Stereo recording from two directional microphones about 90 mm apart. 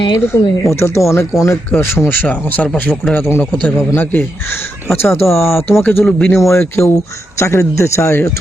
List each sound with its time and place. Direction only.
0.0 s speech: 55° left (ahead or behind)
0.6 s speech: 30° left (ahead or behind)
3.2 s speech: 25° left (ahead or behind)
6.1 s speech: 10° left (ahead or behind)
6.5 s speech: 30° left (ahead or behind)